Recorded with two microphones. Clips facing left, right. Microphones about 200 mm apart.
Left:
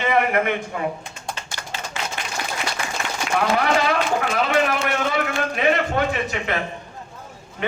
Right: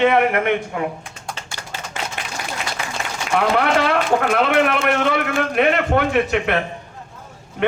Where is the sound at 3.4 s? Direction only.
60° right (ahead or behind).